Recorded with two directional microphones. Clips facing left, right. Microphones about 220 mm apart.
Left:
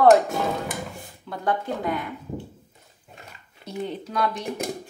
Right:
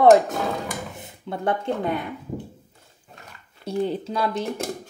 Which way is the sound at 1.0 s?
25° right (ahead or behind).